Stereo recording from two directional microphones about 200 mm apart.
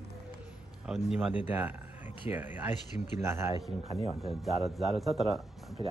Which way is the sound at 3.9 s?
30° left (ahead or behind).